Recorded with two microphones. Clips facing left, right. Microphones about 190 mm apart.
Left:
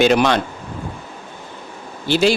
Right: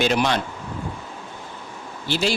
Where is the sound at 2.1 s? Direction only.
70° left (ahead or behind).